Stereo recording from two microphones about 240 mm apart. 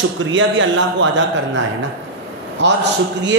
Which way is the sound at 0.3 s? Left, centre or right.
Right.